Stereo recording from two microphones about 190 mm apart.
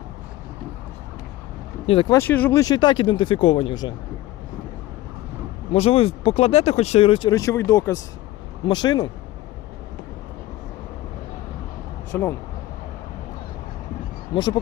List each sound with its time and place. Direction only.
1.9 s speech: 30° left (ahead or behind)
2.1 s speech: 10° left (ahead or behind)
5.7 s speech: 30° left (ahead or behind)
12.1 s speech: 10° left (ahead or behind)
14.3 s speech: 25° left (ahead or behind)